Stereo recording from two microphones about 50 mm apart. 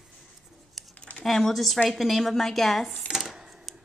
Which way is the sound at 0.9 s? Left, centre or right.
Left.